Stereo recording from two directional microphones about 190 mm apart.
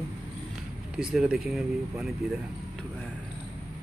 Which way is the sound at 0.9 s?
5° right (ahead or behind).